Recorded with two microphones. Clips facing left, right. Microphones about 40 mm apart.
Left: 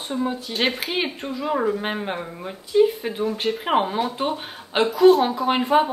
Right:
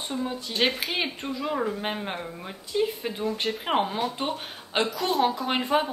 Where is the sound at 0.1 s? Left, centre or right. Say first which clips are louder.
Left 6 dB; centre.